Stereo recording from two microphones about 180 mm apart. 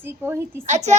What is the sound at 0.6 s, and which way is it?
Speech, 40° right (ahead or behind).